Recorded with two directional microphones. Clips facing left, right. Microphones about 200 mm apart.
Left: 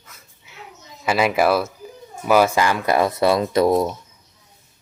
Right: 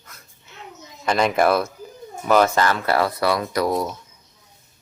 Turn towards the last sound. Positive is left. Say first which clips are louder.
# left 5 dB
turn(degrees=25)  # may be behind; listen again after turning